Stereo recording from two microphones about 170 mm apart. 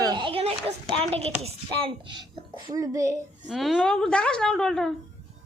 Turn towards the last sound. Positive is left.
turn(degrees=5)  # may be behind; listen again after turning